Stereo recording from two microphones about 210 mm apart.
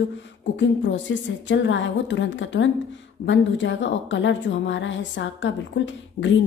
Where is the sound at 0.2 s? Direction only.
60° left (ahead or behind).